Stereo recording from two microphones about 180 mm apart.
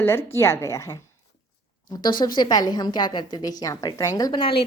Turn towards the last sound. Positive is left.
turn(degrees=30)  # may be behind; listen again after turning